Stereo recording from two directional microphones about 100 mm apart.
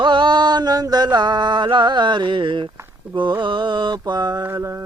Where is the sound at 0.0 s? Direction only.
50° right (ahead or behind).